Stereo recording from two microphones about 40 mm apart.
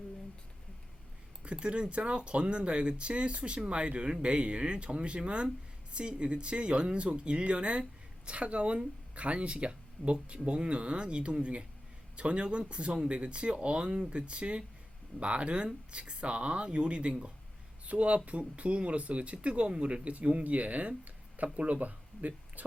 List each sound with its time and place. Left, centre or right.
1.5 s speech: right